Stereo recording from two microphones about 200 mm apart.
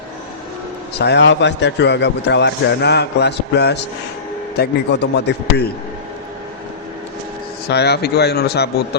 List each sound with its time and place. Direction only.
0.9 s a man's voice: 60° left (ahead or behind)
7.7 s a man's voice: 55° left (ahead or behind)